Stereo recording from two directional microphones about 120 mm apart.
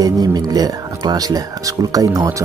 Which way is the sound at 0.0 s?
35° right (ahead or behind).